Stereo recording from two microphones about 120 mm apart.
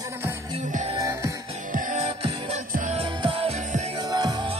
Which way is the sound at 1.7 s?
80° right.